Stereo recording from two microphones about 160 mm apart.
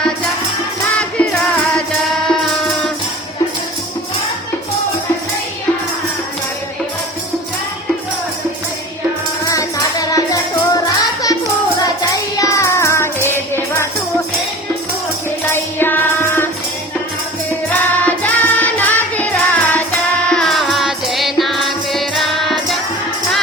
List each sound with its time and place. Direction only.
0.9 s music: 5° left (ahead or behind)
9.5 s music: 20° left (ahead or behind)
15.4 s music: 15° left (ahead or behind)
17.7 s music: 10° left (ahead or behind)